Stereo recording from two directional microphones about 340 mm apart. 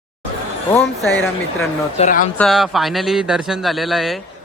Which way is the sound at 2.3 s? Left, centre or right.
Centre.